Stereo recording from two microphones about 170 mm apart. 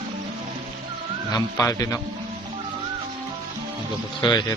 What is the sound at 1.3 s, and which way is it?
Speech, 20° left (ahead or behind).